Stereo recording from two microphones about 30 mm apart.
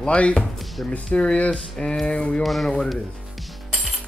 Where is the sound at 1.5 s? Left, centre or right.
Left.